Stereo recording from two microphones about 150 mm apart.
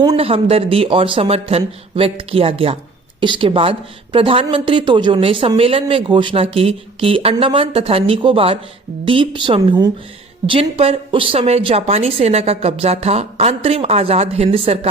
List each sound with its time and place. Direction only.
0.2 s speech: 40° right (ahead or behind)